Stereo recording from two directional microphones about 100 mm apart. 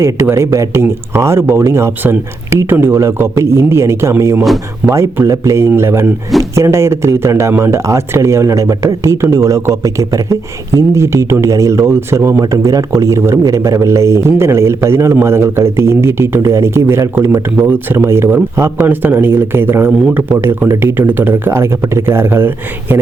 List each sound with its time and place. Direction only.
0.0 s speech: 30° right (ahead or behind)